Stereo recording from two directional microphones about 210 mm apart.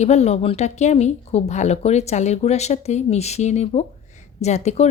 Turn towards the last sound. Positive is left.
turn(degrees=30)  # may be behind; listen again after turning